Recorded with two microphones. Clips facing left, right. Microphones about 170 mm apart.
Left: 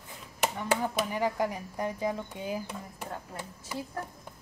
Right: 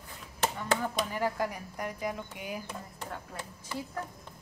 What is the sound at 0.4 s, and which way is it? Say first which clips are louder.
Speech: left 1 dB; 15° left (ahead or behind).